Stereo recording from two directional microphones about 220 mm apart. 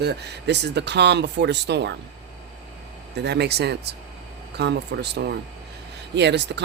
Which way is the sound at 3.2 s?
50° right (ahead or behind).